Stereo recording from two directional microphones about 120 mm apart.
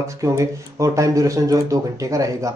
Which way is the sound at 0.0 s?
25° right (ahead or behind).